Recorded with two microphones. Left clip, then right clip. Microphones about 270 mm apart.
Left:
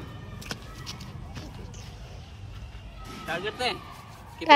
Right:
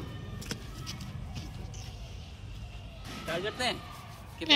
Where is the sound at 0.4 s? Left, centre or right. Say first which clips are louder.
Left 4 dB; centre.